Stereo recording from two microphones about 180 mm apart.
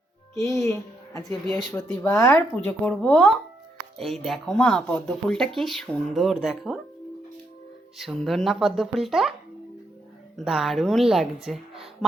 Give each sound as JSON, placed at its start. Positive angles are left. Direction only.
{"t": 0.3, "sound": "a woman's voice", "side_deg": 15}
{"t": 1.5, "sound": "speech", "side_deg": 0}
{"t": 2.0, "sound": "speech", "side_deg": 15}
{"t": 7.9, "sound": "speech", "side_deg": 0}
{"t": 10.3, "sound": "speech", "side_deg": 0}
{"t": 11.4, "sound": "a sound", "side_deg": 0}